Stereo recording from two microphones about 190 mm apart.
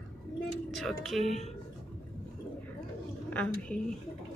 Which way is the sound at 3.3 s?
5° left (ahead or behind).